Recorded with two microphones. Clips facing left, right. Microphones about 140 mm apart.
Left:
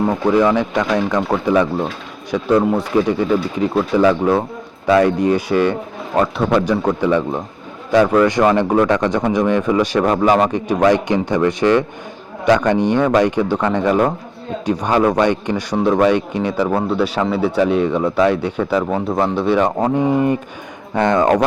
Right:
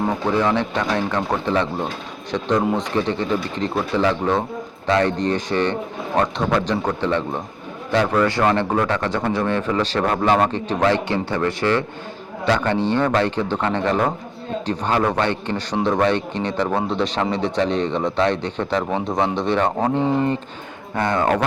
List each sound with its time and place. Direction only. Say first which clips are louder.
0.3 s a man's voice: left 6 dB; 10° left (ahead or behind)